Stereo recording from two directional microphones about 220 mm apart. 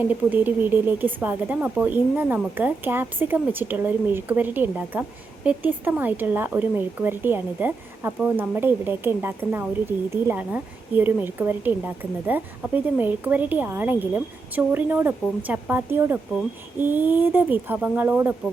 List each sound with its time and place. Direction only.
0.1 s speech: 10° right (ahead or behind)